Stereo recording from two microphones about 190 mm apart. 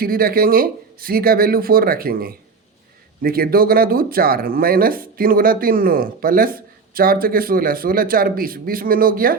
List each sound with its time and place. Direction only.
0.0 s speech: 50° right (ahead or behind)